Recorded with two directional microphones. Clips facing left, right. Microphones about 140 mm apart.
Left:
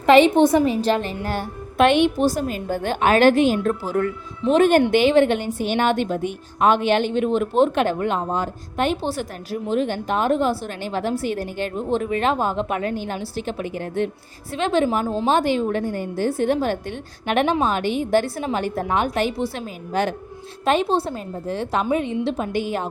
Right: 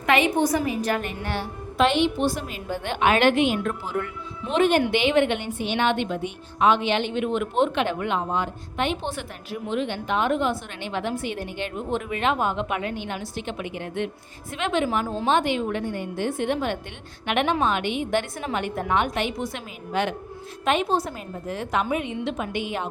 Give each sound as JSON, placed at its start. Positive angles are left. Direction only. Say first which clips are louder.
{"t": 0.0, "sound": "a woman's voice", "louder": "left 8 dB", "side_deg": 30}
{"t": 1.8, "sound": "a woman's voice", "louder": "left 4 dB", "side_deg": 55}
{"t": 2.1, "sound": "a woman's voice", "louder": "left 5 dB", "side_deg": 40}